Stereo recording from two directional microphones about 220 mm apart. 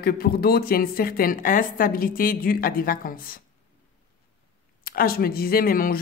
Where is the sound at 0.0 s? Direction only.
45° left (ahead or behind).